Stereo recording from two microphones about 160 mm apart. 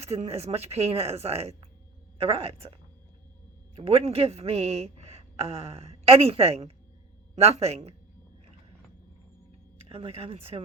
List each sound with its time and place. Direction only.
0.1 s a woman's voice: 40° right (ahead or behind)
3.8 s a woman's voice: 40° right (ahead or behind)
9.9 s a woman's voice: 40° right (ahead or behind)